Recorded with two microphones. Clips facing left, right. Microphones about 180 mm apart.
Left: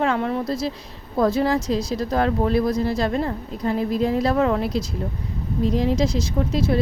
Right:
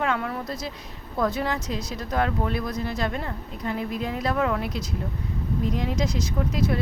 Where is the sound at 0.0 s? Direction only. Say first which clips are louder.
Left 5 dB; 30° left (ahead or behind).